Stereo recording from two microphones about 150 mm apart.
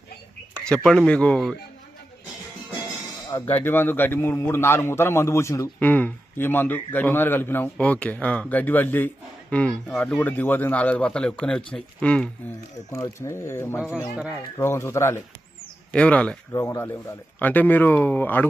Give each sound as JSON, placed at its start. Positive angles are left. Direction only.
{"t": 0.7, "sound": "a man's voice", "side_deg": 5}
{"t": 3.6, "sound": "a man's voice", "side_deg": 15}
{"t": 12.9, "sound": "a man's voice", "side_deg": 20}
{"t": 16.5, "sound": "a man's voice", "side_deg": 20}